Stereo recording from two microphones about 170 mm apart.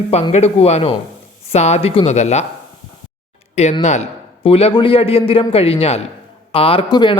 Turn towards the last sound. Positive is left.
turn(degrees=30)  # may be behind; listen again after turning